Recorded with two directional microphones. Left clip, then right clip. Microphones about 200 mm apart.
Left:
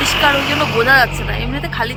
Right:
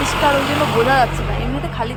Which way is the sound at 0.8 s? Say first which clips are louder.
Left 3 dB; centre (ahead or behind).